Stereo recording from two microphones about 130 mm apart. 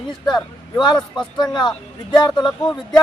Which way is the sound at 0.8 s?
30° left (ahead or behind).